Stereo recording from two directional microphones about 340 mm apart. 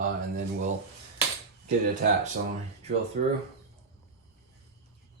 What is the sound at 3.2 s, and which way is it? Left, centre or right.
Speech, right.